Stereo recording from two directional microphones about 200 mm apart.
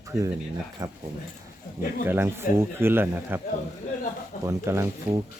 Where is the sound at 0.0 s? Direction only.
15° right (ahead or behind).